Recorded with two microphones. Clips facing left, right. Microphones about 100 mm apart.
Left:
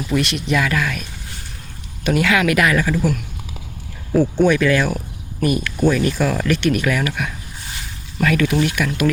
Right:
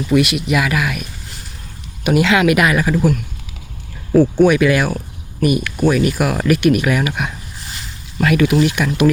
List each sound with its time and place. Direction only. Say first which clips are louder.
0.1 s speech: right 4 dB; 5° right (ahead or behind)
2.0 s speech: right 3 dB; 20° right (ahead or behind)
4.4 s speech: right 3 dB; 15° right (ahead or behind)